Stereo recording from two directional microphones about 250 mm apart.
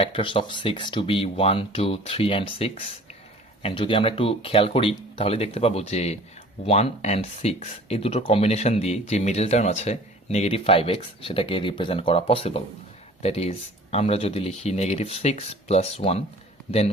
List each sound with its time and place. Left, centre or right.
0.0 s speech: left